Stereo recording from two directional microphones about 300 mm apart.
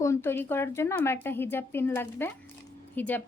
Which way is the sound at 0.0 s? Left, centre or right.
Centre.